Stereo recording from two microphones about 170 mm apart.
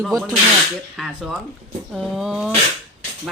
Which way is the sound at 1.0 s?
5° right (ahead or behind).